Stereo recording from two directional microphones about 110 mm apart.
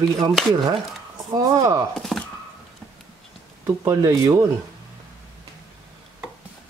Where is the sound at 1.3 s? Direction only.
30° right (ahead or behind).